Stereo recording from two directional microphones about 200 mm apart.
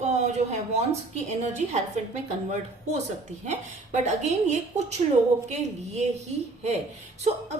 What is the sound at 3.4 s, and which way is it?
A woman's voice, 35° right (ahead or behind).